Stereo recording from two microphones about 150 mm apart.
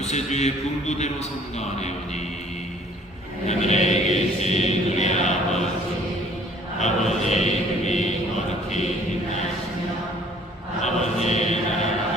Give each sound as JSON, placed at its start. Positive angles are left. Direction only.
{"t": 0.0, "sound": "a man's voice", "side_deg": 50}
{"t": 3.4, "sound": "a man's voice", "side_deg": 50}
{"t": 6.7, "sound": "chant", "side_deg": 50}
{"t": 10.8, "sound": "chant", "side_deg": 50}